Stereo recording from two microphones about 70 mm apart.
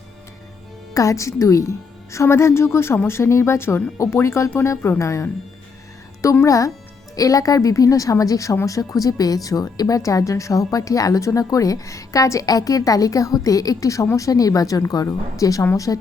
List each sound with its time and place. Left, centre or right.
0.9 s speech: left
6.4 s speech: left